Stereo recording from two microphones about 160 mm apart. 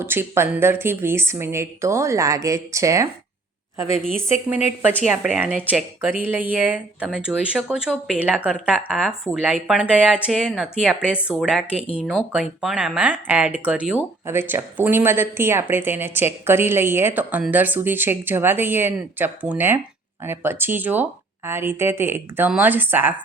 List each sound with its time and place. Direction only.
0.0 s speech: 15° right (ahead or behind)
5.0 s speech: 5° right (ahead or behind)